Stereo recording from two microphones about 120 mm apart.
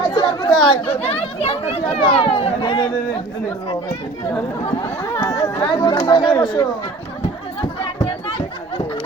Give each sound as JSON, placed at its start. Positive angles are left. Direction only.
{"t": 0.1, "sound": "chatter", "side_deg": 45}
{"t": 0.9, "sound": "speech", "side_deg": 60}
{"t": 5.1, "sound": "speech", "side_deg": 25}
{"t": 5.5, "sound": "speech", "side_deg": 45}